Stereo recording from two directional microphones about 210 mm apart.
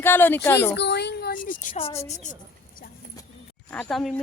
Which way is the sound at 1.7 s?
25° left (ahead or behind).